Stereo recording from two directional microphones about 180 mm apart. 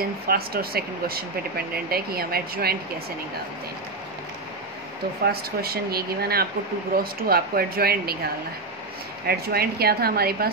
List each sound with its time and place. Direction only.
0.3 s speech: 55° right (ahead or behind)
5.2 s speech: 60° right (ahead or behind)
9.3 s speech: 60° right (ahead or behind)